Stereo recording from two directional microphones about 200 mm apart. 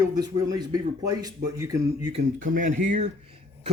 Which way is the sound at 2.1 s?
40° right (ahead or behind).